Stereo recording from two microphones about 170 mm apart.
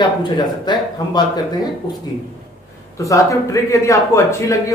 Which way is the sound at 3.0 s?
20° left (ahead or behind).